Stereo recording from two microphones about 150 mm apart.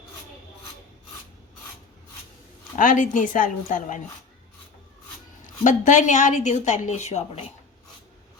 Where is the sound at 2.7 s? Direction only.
60° left (ahead or behind).